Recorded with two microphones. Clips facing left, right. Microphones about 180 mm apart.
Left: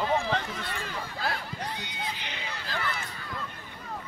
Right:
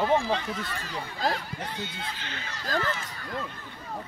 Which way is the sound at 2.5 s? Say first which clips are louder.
Right 6 dB; 40° right (ahead or behind).